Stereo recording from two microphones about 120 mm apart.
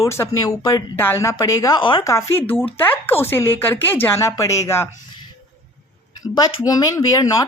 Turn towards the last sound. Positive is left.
turn(degrees=30)  # may be behind; listen again after turning